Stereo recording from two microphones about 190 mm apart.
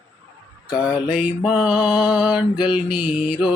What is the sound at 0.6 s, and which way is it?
Mantra, 5° right (ahead or behind).